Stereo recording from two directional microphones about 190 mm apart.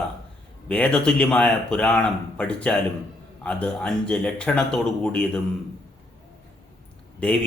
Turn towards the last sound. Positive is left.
turn(degrees=5)  # may be behind; listen again after turning